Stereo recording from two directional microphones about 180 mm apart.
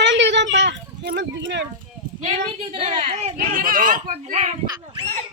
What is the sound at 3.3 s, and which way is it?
A child's voice, 50° right (ahead or behind).